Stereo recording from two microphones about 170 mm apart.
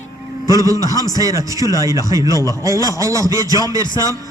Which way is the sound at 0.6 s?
20° right (ahead or behind).